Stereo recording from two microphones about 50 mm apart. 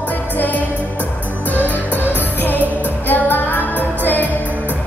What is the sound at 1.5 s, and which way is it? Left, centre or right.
Music, left.